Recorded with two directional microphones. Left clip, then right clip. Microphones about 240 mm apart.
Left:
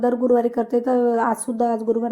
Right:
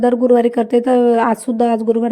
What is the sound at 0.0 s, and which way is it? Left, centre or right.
Speech, right.